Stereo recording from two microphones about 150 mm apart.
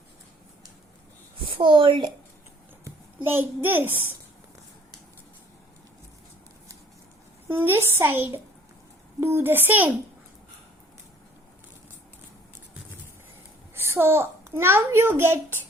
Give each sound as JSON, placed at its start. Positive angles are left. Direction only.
{"t": 1.5, "sound": "a woman's voice", "side_deg": -35}
{"t": 2.8, "sound": "a child's voice", "side_deg": -15}
{"t": 7.4, "sound": "a woman's voice", "side_deg": -15}
{"t": 13.7, "sound": "a child's voice", "side_deg": -15}